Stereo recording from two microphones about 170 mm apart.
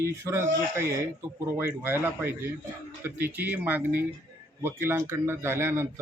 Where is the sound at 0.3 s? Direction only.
15° right (ahead or behind).